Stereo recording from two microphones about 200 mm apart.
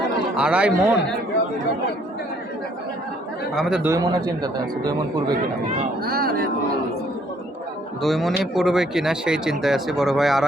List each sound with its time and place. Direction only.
0.3 s speech: 5° right (ahead or behind)
3.5 s speech: centre (ahead or behind)
3.8 s speech: 15° right (ahead or behind)
6.1 s speech: 50° right (ahead or behind)
8.0 s speech: centre (ahead or behind)